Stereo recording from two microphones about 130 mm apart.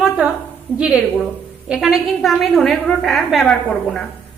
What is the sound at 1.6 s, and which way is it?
A woman's voice, 5° right (ahead or behind).